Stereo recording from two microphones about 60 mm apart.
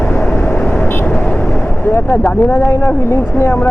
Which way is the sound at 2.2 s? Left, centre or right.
Left.